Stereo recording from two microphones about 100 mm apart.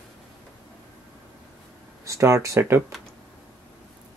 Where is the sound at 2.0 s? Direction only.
30° right (ahead or behind).